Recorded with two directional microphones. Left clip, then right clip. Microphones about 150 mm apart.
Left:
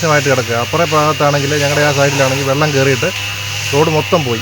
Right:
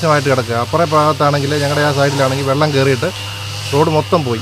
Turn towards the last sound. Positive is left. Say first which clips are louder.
# left 1 dB
turn(degrees=-15)  # may be behind; listen again after turning